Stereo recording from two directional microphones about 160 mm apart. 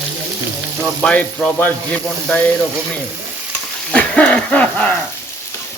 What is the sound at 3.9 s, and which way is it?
Speech, 10° left (ahead or behind).